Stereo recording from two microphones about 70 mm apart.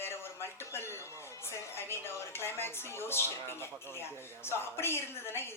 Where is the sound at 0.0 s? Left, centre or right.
Left.